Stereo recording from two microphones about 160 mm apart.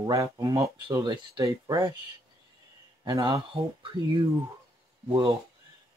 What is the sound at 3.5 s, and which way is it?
Speech, 35° right (ahead or behind).